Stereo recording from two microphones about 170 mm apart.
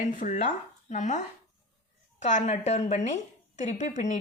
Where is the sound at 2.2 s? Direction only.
45° left (ahead or behind).